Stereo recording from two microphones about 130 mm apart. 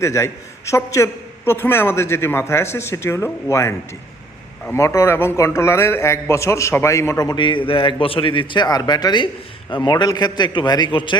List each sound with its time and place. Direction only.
0.0 s a man's voice: 25° left (ahead or behind); by 11.2 s 40° left (ahead or behind)